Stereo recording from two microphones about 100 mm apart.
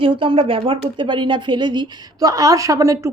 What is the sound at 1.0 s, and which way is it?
A woman's voice, 55° right (ahead or behind).